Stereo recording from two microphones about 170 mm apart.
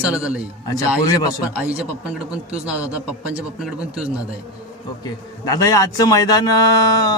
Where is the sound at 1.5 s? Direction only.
5° right (ahead or behind).